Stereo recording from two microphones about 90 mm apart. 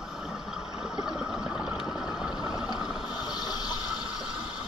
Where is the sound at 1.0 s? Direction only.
5° right (ahead or behind).